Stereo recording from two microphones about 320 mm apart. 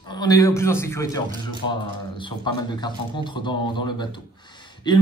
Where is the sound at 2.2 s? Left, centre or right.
Centre.